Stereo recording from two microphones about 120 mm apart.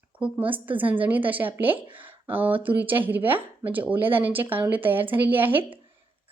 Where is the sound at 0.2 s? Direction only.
15° right (ahead or behind).